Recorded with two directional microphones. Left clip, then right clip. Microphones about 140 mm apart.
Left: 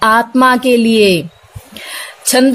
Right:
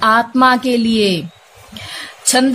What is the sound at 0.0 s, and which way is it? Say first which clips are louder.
A woman's voice: left 2 dB; 40° left (ahead or behind).